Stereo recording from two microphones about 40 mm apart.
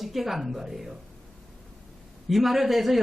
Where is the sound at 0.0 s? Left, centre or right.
Centre.